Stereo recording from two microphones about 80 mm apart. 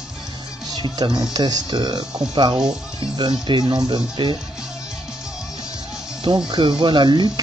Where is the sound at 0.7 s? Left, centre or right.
Right.